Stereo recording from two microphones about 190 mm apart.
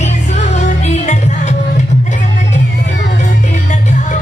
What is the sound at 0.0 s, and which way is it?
Music, 40° left (ahead or behind).